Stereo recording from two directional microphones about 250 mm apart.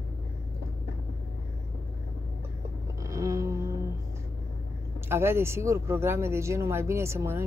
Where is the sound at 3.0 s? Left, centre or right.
Centre.